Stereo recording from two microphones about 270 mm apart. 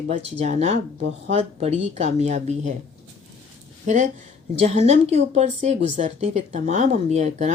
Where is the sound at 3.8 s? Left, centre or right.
Right.